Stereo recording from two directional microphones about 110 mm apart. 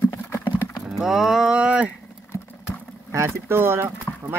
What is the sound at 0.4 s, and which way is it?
Livestock, 15° left (ahead or behind).